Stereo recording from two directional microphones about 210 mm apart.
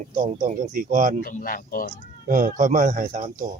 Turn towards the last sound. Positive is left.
turn(degrees=-35)  # may be behind; listen again after turning